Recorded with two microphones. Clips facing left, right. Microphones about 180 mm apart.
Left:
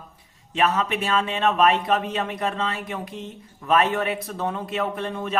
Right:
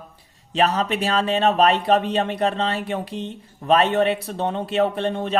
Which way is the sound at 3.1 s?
75° right (ahead or behind).